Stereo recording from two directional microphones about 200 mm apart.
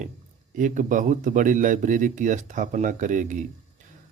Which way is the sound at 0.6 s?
40° right (ahead or behind).